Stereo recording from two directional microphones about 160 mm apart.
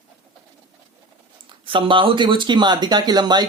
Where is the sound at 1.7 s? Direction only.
30° right (ahead or behind).